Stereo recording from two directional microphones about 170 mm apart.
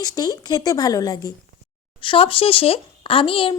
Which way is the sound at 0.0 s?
20° left (ahead or behind).